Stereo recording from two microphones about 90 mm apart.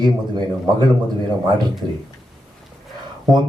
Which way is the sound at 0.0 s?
55° right (ahead or behind).